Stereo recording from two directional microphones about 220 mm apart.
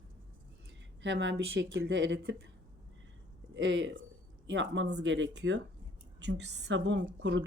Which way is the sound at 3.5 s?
60° right (ahead or behind).